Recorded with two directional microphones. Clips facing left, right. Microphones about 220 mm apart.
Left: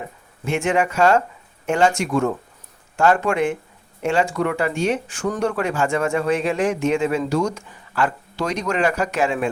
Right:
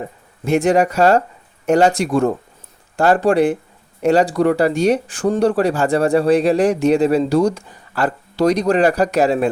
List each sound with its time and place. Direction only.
0.4 s speech: 40° right (ahead or behind)